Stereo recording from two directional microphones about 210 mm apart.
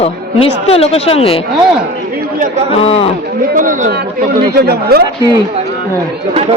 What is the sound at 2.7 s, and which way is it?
Speech, 25° left (ahead or behind).